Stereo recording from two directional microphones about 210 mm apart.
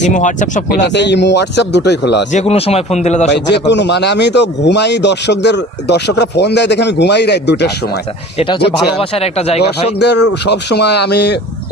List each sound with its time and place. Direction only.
0.0 s a man's voice: 35° left (ahead or behind)
0.9 s a man's voice: 55° left (ahead or behind)
2.3 s a man's voice: 30° left (ahead or behind)
3.2 s a man's voice: 55° left (ahead or behind)
8.4 s speech: 25° left (ahead or behind)
10.0 s speech: 55° left (ahead or behind)